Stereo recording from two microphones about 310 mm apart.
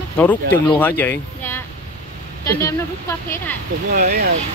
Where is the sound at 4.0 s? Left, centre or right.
Right.